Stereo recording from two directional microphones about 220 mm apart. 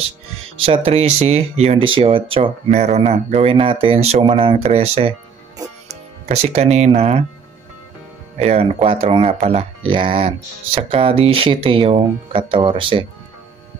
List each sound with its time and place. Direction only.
0.7 s speech: 25° right (ahead or behind)
6.2 s speech: 30° right (ahead or behind)
8.4 s speech: 30° right (ahead or behind)